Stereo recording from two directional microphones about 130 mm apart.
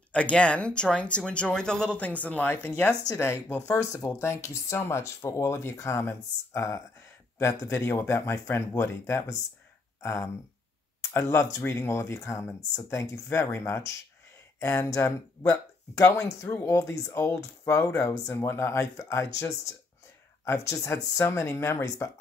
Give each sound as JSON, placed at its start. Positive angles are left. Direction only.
{"t": 0.1, "sound": "speech", "side_deg": 10}
{"t": 3.7, "sound": "speech", "side_deg": 25}